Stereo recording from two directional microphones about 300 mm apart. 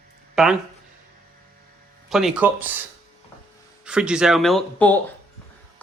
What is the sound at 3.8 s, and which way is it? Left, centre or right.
Speech, centre.